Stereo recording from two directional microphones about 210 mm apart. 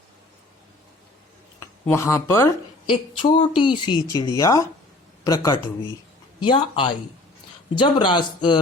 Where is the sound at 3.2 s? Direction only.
25° left (ahead or behind).